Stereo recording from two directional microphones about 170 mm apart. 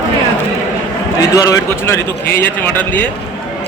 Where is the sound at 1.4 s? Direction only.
20° left (ahead or behind).